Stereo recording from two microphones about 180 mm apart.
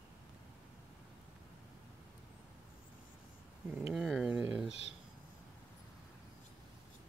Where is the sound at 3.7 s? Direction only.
5° right (ahead or behind).